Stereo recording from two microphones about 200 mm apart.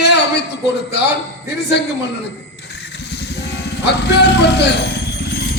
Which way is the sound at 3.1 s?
60° left (ahead or behind).